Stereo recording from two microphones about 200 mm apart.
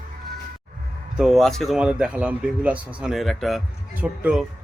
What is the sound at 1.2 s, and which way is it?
Speech, centre (ahead or behind).